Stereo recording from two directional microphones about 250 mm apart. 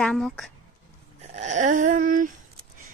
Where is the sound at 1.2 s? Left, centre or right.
Right.